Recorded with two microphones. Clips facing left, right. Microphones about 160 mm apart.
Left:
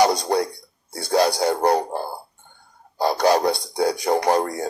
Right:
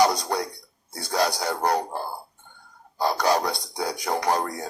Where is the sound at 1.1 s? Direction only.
30° left (ahead or behind).